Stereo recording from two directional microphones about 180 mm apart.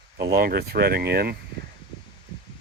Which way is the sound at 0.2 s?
55° right (ahead or behind).